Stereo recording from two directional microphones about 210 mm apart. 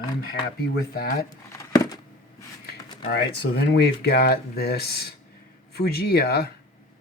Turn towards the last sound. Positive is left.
turn(degrees=50)  # may be behind; listen again after turning